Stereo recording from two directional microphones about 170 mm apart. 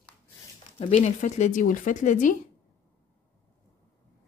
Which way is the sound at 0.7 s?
40° left (ahead or behind).